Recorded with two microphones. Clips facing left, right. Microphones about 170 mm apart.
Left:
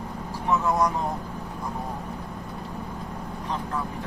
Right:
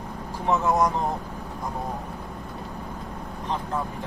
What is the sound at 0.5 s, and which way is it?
Speech, 20° right (ahead or behind).